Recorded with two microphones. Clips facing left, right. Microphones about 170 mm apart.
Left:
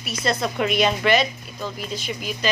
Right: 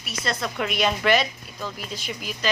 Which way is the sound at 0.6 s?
Centre (ahead or behind).